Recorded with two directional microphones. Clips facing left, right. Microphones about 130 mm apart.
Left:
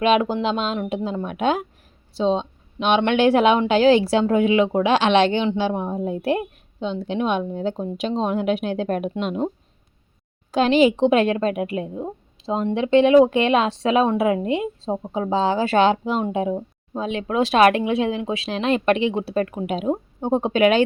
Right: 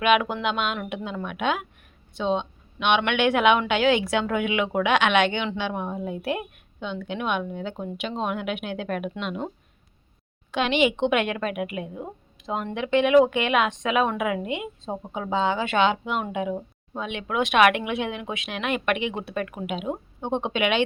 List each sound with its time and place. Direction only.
0.0 s a woman's voice: 30° left (ahead or behind)
10.5 s a woman's voice: 35° left (ahead or behind)